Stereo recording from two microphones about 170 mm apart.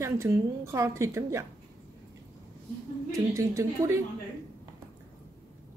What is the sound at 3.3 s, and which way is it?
Speech, 20° right (ahead or behind).